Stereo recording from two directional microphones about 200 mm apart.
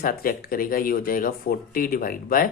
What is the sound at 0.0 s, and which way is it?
Speech, 45° left (ahead or behind).